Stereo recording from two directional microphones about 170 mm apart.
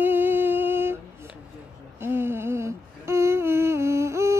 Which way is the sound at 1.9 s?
15° right (ahead or behind).